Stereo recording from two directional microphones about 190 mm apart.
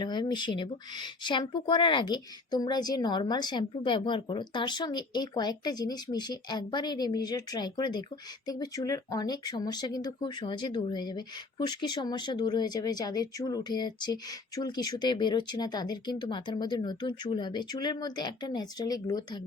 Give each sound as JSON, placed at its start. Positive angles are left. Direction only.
{"t": 0.0, "sound": "speech", "side_deg": 25}